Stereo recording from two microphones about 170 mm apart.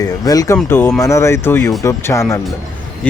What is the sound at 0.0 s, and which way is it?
Speech, 20° left (ahead or behind).